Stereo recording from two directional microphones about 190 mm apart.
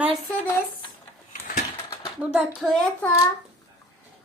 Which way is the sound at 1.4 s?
40° left (ahead or behind).